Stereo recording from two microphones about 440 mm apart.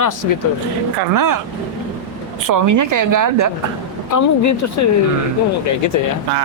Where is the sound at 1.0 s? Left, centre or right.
Right.